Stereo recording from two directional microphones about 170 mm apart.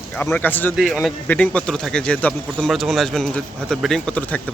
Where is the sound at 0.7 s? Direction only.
Centre (ahead or behind).